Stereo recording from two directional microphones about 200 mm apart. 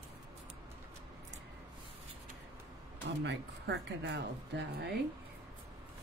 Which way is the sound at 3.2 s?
60° right (ahead or behind).